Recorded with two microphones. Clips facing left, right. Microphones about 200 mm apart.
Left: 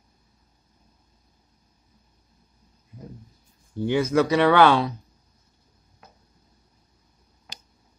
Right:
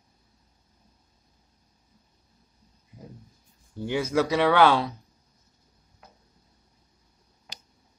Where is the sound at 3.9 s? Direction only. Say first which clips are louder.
Left 4 dB; 5° right (ahead or behind).